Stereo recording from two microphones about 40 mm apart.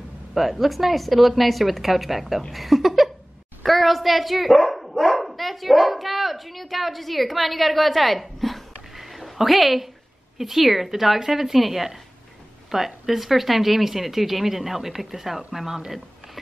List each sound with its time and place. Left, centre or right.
0.3 s a woman's voice: centre